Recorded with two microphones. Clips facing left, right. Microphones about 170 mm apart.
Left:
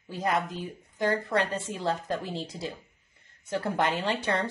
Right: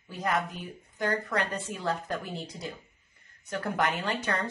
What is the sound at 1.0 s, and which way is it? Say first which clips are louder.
A woman's voice: left 3 dB; 30° left (ahead or behind).